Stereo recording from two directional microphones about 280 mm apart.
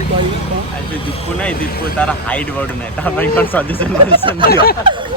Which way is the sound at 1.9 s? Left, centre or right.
Centre.